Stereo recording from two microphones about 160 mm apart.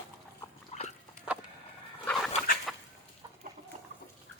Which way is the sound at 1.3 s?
5° right (ahead or behind).